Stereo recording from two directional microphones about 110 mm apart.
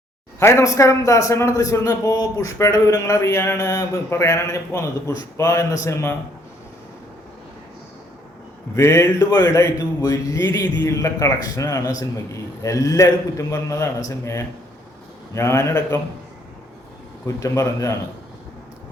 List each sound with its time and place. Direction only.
0.3 s a man's voice: 25° left (ahead or behind)
8.7 s a man's voice: 25° left (ahead or behind)
17.2 s a man's voice: 30° left (ahead or behind)